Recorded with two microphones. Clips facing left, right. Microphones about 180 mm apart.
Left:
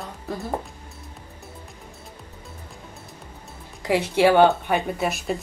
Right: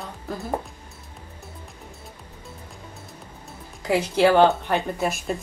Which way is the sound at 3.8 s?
Centre (ahead or behind).